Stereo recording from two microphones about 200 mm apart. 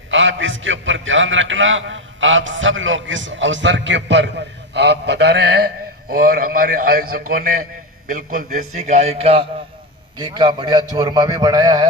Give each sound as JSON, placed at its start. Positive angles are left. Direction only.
{"t": 0.1, "sound": "a man's voice", "side_deg": -70}